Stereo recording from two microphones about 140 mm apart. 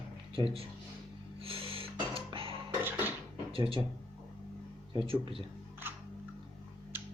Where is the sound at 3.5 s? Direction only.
40° right (ahead or behind).